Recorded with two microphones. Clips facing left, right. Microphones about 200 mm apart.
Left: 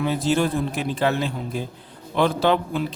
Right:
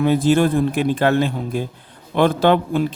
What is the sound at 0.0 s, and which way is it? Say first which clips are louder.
A man's voice: right 6 dB; 55° right (ahead or behind).